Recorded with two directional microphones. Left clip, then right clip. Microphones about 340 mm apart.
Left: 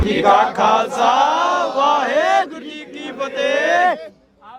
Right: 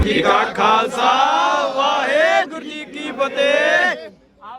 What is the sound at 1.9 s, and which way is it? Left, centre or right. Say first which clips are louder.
Chant: right 1 dB; centre.